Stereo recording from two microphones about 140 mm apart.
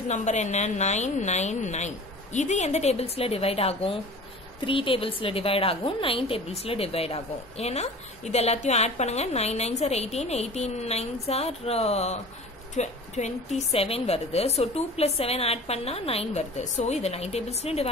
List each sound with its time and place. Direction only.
0.1 s a woman's voice: 55° left (ahead or behind)